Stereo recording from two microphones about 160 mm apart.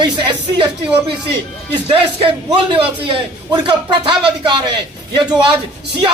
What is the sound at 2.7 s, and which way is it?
Speech, 30° right (ahead or behind).